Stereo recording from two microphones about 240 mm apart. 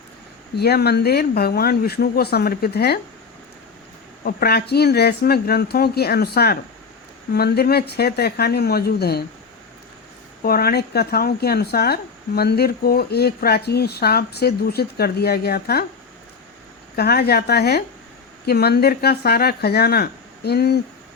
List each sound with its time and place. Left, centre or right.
0.5 s speech: left
4.2 s speech: left
10.4 s speech: left
16.9 s speech: left